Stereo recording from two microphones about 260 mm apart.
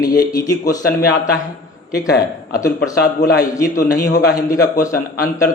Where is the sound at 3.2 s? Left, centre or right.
Left.